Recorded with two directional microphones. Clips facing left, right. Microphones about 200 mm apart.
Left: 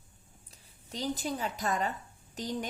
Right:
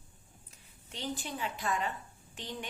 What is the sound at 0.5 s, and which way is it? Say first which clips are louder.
A woman's voice: left 6 dB; 35° left (ahead or behind).